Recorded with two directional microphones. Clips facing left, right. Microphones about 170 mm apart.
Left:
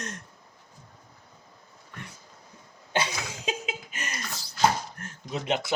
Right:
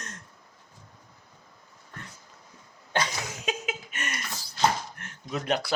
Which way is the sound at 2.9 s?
25° left (ahead or behind).